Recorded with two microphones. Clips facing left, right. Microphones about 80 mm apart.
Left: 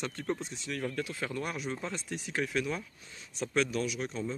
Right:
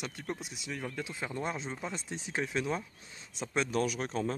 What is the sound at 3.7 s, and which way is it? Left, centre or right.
Speech, right.